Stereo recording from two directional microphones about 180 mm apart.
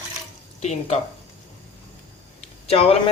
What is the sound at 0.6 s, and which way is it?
Speech, 40° left (ahead or behind).